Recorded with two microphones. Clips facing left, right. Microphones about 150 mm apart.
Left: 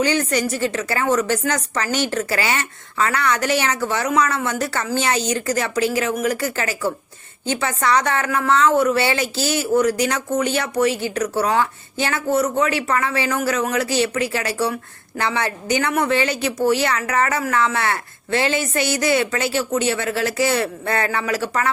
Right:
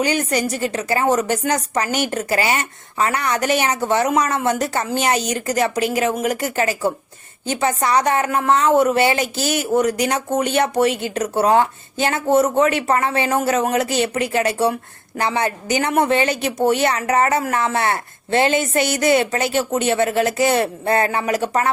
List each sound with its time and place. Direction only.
0.0 s a woman's voice: 15° right (ahead or behind)